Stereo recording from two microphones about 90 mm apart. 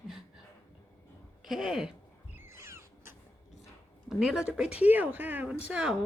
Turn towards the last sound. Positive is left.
turn(degrees=-10)  # may be behind; listen again after turning